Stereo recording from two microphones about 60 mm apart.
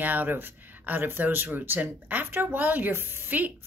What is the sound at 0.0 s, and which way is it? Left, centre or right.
Speech, right.